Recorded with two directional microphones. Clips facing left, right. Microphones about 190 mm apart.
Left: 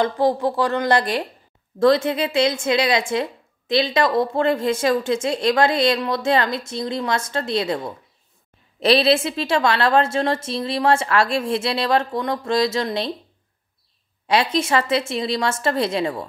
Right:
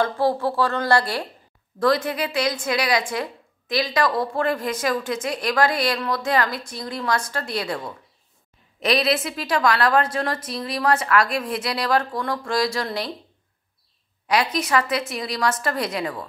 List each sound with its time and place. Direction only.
0.0 s a woman's voice: 20° left (ahead or behind)
14.2 s a woman's voice: 25° left (ahead or behind)